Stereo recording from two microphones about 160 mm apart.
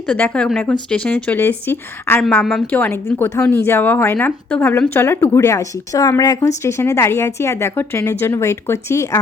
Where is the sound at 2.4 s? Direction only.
Centre (ahead or behind).